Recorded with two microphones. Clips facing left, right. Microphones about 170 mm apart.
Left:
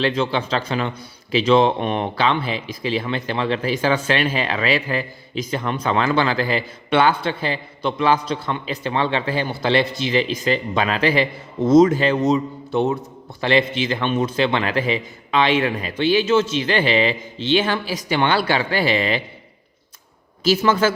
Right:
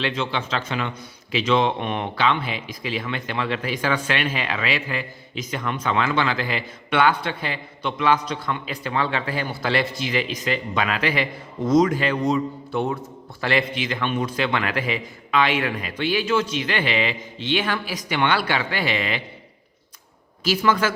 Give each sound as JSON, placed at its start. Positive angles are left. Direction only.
{"t": 0.0, "sound": "a man's voice", "side_deg": 35}
{"t": 20.4, "sound": "a man's voice", "side_deg": 30}